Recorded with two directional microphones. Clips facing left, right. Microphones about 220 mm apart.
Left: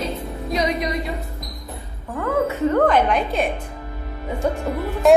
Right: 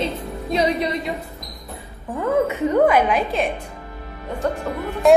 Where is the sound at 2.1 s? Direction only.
15° right (ahead or behind); by 5.1 s 5° left (ahead or behind).